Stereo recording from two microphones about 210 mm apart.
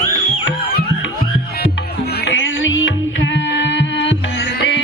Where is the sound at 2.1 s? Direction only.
55° left (ahead or behind).